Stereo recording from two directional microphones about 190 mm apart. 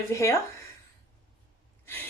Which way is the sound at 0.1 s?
15° left (ahead or behind).